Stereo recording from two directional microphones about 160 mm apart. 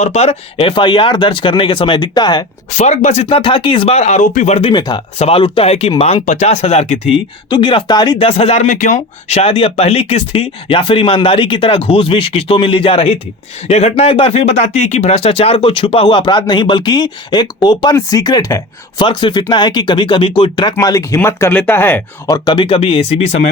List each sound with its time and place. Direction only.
0.0 s speech: 45° left (ahead or behind); by 2.4 s 25° left (ahead or behind)
2.7 s speech: 45° left (ahead or behind)
3.2 s speech: 30° left (ahead or behind)
4.7 s speech: 25° left (ahead or behind)
8.6 s speech: 50° left (ahead or behind); by 22.4 s 15° left (ahead or behind)
22.4 s speech: 30° left (ahead or behind)